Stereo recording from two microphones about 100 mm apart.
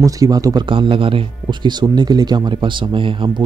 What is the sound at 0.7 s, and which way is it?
Speech, 60° right (ahead or behind).